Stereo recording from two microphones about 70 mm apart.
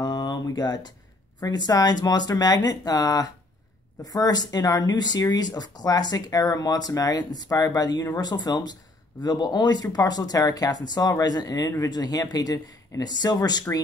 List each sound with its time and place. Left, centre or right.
0.0 s a sound: left
1.4 s speech: left
5.3 s speech: left